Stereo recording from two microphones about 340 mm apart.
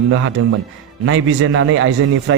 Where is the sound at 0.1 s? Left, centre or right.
Right.